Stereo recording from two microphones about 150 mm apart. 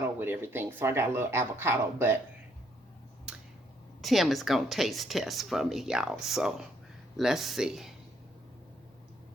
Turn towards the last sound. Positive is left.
turn(degrees=-5)  # may be behind; listen again after turning